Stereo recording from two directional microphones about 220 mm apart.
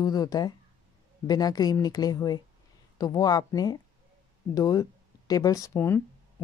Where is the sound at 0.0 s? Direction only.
15° left (ahead or behind).